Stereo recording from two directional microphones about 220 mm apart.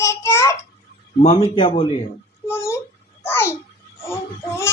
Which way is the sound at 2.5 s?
10° left (ahead or behind).